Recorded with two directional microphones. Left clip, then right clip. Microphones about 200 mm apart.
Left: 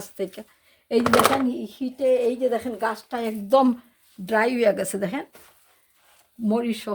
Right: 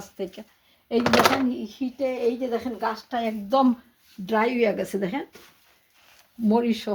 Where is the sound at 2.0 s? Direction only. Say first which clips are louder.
Left 5 dB; 50° left (ahead or behind); by 5.2 s 30° left (ahead or behind).